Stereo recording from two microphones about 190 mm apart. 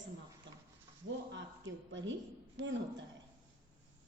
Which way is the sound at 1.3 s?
75° right (ahead or behind).